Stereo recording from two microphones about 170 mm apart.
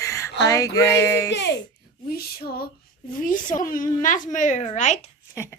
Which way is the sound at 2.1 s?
65° left (ahead or behind).